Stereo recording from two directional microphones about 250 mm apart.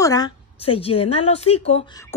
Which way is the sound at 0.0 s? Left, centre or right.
Centre.